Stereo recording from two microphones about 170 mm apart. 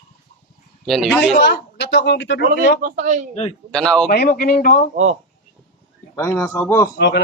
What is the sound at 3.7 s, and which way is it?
Speech, 5° left (ahead or behind).